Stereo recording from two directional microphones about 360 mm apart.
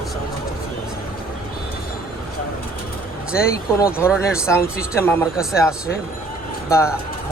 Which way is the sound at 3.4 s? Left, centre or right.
Left.